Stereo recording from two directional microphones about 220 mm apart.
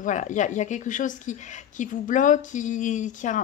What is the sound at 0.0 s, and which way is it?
Speech, 35° left (ahead or behind).